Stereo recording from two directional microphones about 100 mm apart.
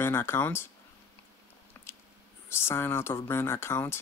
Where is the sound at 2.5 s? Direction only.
25° left (ahead or behind).